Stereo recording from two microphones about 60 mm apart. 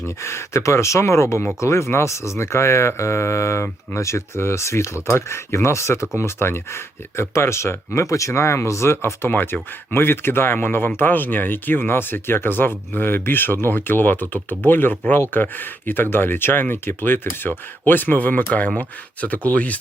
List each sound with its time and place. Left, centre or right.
0.2 s speech: left
7.9 s speech: left
9.3 s speech: left